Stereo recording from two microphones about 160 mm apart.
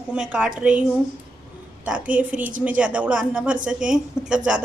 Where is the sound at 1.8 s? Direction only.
10° right (ahead or behind).